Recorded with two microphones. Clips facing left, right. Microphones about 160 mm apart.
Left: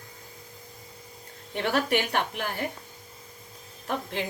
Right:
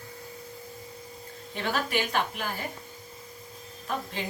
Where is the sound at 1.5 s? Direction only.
65° left (ahead or behind).